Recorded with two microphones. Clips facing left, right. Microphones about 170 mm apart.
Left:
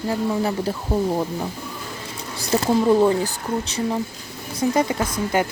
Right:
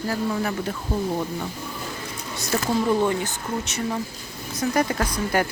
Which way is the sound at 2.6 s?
30° left (ahead or behind).